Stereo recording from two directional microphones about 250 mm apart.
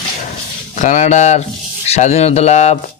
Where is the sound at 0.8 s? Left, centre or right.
Left.